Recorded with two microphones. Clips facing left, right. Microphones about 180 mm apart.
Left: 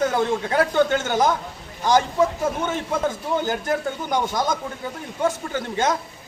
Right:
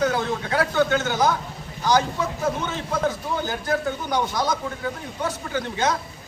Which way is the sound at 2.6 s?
50° left (ahead or behind).